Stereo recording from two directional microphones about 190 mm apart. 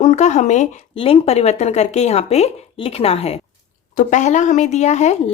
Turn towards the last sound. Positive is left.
turn(degrees=35)  # may be behind; listen again after turning